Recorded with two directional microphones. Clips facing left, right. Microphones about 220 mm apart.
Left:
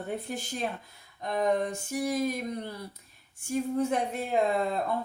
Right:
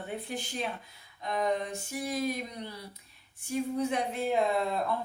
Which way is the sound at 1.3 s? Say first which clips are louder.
Left 3 dB; 45° left (ahead or behind).